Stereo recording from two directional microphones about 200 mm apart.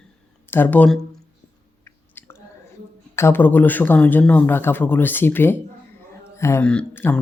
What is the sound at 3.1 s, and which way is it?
Speech, 10° left (ahead or behind).